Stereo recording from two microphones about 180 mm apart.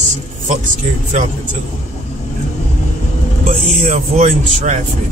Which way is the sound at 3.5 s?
40° right (ahead or behind).